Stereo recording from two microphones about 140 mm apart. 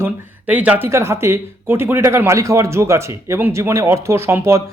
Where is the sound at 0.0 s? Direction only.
10° right (ahead or behind).